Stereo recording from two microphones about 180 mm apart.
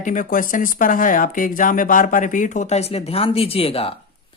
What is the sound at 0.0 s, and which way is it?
Speech, 45° left (ahead or behind).